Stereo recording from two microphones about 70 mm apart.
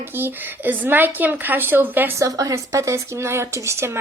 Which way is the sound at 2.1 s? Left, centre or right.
Right.